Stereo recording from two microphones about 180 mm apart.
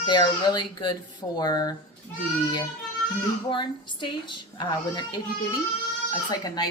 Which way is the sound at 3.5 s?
25° left (ahead or behind).